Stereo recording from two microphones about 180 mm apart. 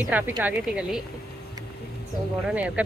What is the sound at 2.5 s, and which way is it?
Speech, 5° right (ahead or behind).